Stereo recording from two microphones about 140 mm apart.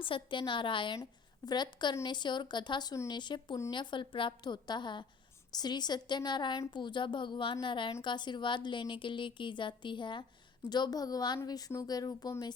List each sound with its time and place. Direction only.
0.0 s a woman's voice: 35° left (ahead or behind)